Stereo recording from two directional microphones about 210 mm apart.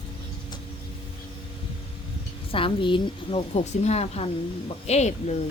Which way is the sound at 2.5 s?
25° left (ahead or behind).